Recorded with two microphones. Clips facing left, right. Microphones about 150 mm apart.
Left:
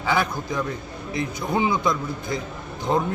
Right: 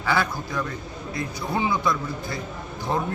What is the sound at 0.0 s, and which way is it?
A man's voice, 20° left (ahead or behind).